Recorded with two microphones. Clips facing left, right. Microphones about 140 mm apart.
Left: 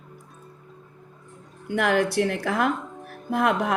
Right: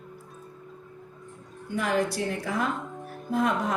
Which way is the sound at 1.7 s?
75° left (ahead or behind).